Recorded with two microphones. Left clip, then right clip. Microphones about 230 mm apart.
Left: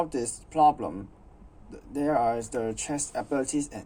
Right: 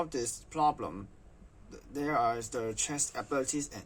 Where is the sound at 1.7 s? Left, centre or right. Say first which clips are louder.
Left 6 dB; centre.